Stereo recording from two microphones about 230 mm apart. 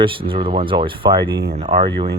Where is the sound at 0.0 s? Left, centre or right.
Right.